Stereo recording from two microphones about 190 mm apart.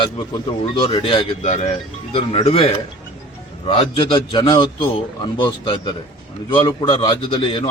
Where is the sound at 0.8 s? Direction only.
30° left (ahead or behind).